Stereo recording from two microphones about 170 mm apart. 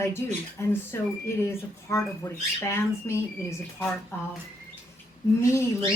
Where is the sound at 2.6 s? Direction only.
15° left (ahead or behind).